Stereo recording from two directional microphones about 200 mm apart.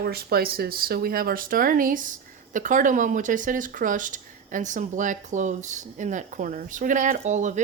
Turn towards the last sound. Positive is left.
turn(degrees=-35)  # may be behind; listen again after turning